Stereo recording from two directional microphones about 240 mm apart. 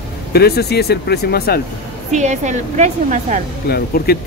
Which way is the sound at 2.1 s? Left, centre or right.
Right.